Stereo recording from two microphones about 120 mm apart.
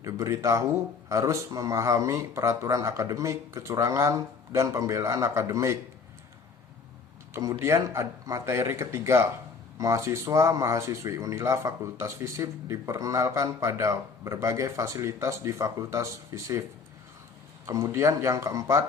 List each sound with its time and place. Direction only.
0.0 s speech: 25° right (ahead or behind)
7.6 s speech: 25° right (ahead or behind)
17.7 s speech: 30° right (ahead or behind)